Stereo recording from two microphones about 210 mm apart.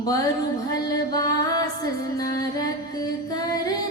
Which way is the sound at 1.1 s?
20° left (ahead or behind).